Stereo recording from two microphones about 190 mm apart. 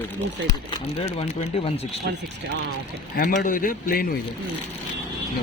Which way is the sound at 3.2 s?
45° left (ahead or behind).